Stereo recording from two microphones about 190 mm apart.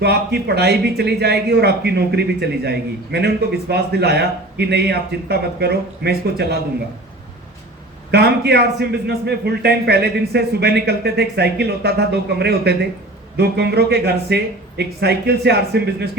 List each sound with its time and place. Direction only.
0.0 s speech: 60° right (ahead or behind)
8.1 s speech: 60° right (ahead or behind)